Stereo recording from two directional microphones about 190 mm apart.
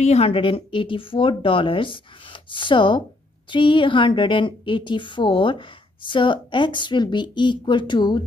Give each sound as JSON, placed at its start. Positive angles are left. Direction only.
{"t": 0.0, "sound": "a woman's voice", "side_deg": 35}